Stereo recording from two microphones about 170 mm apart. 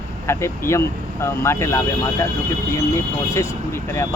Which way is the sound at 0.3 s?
15° left (ahead or behind).